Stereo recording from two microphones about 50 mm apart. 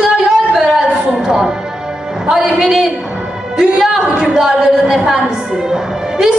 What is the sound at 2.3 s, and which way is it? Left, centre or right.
A man's voice, centre.